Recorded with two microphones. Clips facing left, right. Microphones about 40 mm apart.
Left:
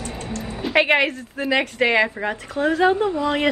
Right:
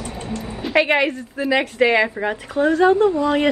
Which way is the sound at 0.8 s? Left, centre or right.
Centre.